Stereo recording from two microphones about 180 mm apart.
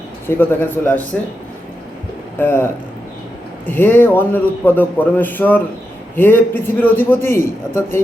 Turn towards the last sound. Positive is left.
turn(degrees=15)  # may be behind; listen again after turning